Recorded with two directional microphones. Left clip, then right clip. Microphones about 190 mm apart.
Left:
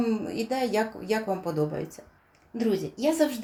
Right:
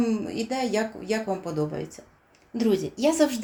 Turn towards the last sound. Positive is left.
turn(degrees=-25)  # may be behind; listen again after turning